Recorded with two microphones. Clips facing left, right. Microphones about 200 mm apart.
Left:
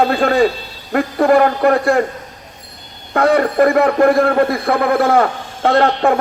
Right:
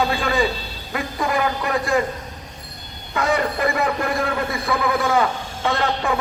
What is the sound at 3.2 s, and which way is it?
A man's voice, 60° left (ahead or behind).